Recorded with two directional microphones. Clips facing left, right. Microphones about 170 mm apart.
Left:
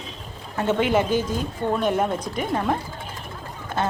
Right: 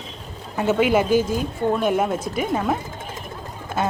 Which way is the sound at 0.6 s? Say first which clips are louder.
Right 2 dB; 10° right (ahead or behind).